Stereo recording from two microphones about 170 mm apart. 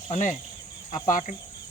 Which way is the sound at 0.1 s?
45° left (ahead or behind).